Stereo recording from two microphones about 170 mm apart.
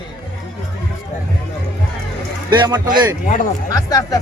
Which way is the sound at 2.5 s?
25° right (ahead or behind).